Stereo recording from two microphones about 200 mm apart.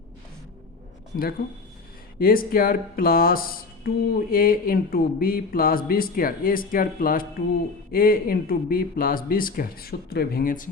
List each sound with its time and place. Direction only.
2.1 s speech: 45° left (ahead or behind)